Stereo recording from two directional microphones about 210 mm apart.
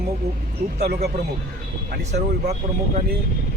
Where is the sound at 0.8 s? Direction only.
50° right (ahead or behind).